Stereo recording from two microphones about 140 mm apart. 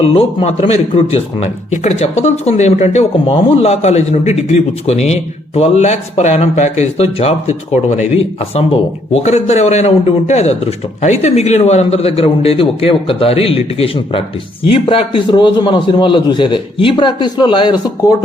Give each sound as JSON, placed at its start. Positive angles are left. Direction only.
{"t": 0.0, "sound": "a man's voice", "side_deg": 45}